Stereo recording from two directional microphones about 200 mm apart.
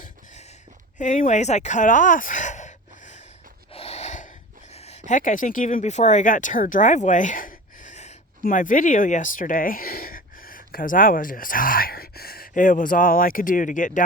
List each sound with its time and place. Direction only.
0.9 s speech: 40° left (ahead or behind)
3.7 s snort: 30° left (ahead or behind)
4.7 s speech: 35° left (ahead or behind)